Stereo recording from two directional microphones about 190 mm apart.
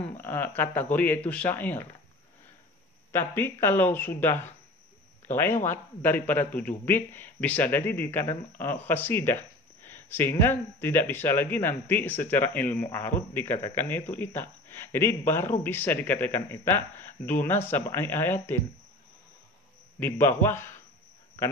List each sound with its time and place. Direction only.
0.0 s speech: 10° left (ahead or behind)
3.1 s speech: 10° left (ahead or behind)
20.0 s speech: 10° left (ahead or behind)